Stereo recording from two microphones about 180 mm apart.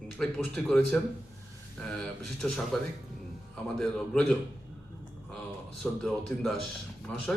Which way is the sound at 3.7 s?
5° left (ahead or behind).